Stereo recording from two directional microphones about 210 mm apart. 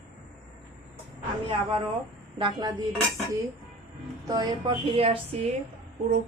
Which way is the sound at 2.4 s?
20° right (ahead or behind).